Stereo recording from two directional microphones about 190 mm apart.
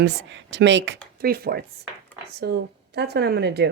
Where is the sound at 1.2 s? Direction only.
55° right (ahead or behind).